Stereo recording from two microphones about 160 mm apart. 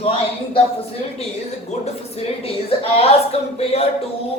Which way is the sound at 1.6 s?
40° left (ahead or behind).